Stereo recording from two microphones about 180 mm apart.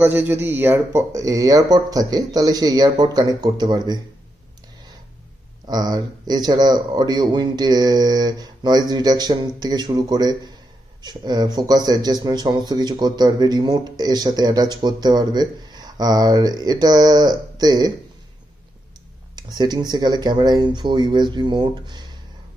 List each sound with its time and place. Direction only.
0.0 s speech: 10° right (ahead or behind)
5.7 s speech: 20° right (ahead or behind)
19.3 s speech: 25° right (ahead or behind)